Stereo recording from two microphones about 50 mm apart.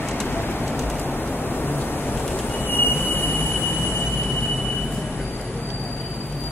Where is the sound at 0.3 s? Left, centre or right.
Left.